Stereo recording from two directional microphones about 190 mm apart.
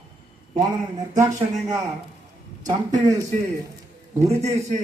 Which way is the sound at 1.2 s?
20° right (ahead or behind).